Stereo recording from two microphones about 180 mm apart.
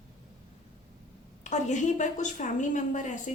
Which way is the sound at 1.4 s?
40° left (ahead or behind).